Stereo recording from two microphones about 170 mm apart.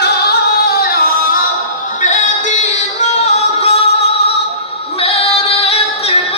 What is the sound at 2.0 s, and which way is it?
Music, 45° left (ahead or behind).